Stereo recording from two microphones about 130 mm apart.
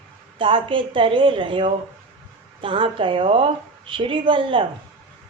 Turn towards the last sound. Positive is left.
turn(degrees=-40)  # may be behind; listen again after turning